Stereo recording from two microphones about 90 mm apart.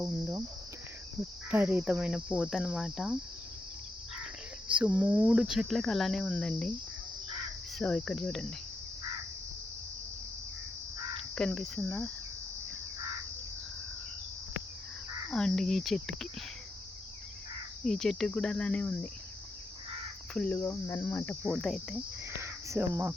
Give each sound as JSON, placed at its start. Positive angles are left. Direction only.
{"t": 0.0, "sound": "cricket", "side_deg": -30}
{"t": 1.5, "sound": "cricket", "side_deg": -20}
{"t": 1.8, "sound": "cricket", "side_deg": -10}
{"t": 4.7, "sound": "a sound", "side_deg": -15}
{"t": 5.3, "sound": "cricket", "side_deg": -5}
{"t": 7.8, "sound": "cricket", "side_deg": 10}
{"t": 11.3, "sound": "cricket", "side_deg": 5}
{"t": 15.3, "sound": "cricket", "side_deg": 10}
{"t": 17.8, "sound": "cricket", "side_deg": 5}
{"t": 20.5, "sound": "cricket", "side_deg": 30}
{"t": 21.5, "sound": "cricket", "side_deg": 0}
{"t": 22.4, "sound": "speech", "side_deg": -30}